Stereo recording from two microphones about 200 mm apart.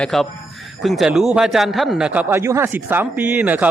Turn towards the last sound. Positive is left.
turn(degrees=-10)  # may be behind; listen again after turning